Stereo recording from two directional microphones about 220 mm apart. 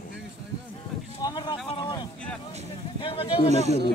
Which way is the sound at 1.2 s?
20° left (ahead or behind).